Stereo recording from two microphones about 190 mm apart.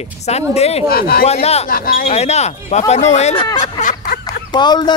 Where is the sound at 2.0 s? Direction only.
35° left (ahead or behind).